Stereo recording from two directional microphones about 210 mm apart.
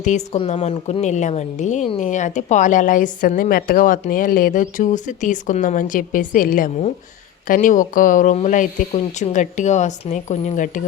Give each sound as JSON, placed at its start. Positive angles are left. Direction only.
{"t": 0.0, "sound": "a woman's voice", "side_deg": 35}